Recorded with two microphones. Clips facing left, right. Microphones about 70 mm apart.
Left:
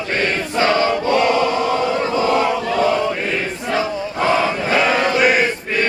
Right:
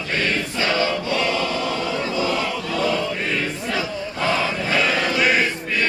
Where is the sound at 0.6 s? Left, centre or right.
Left.